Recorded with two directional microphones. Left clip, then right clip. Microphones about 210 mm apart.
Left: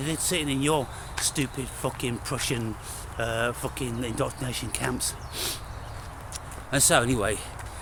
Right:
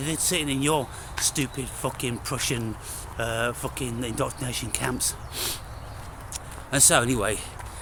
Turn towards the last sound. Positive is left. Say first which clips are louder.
# even
turn(degrees=-10)  # may be behind; listen again after turning